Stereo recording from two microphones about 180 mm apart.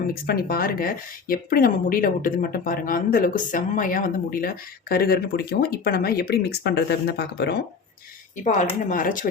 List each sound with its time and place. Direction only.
0.1 s speech: 55° left (ahead or behind)
8.9 s speech: 50° left (ahead or behind)